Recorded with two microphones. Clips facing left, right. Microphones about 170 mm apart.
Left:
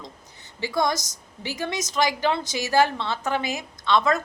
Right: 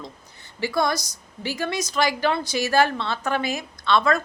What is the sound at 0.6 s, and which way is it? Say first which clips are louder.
A woman's voice: right 1 dB; 20° left (ahead or behind).